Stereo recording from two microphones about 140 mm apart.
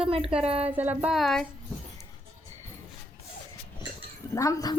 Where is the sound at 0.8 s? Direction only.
10° right (ahead or behind).